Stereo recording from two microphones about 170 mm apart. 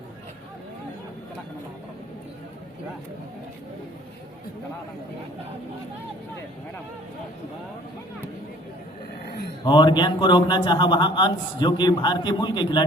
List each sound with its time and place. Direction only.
9.6 s a man's voice: 25° left (ahead or behind)